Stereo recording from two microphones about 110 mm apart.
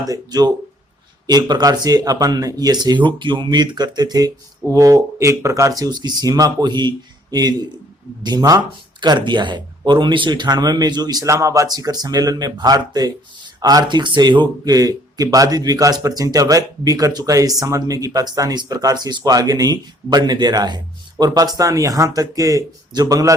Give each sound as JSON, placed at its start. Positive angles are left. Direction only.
{"t": 0.0, "sound": "speech", "side_deg": -35}